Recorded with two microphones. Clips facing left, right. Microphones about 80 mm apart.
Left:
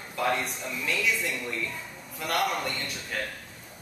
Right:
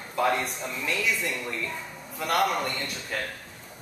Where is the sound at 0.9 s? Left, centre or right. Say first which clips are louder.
Even; centre.